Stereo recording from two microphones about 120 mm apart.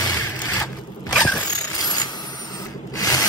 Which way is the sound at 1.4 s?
35° left (ahead or behind).